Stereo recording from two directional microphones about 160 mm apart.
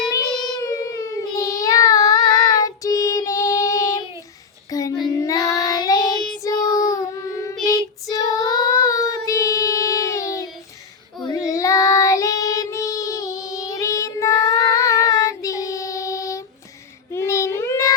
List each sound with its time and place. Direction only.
0.1 s child singing: 20° left (ahead or behind)